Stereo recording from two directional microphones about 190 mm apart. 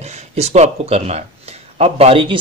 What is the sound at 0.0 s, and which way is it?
A man's voice, 35° right (ahead or behind).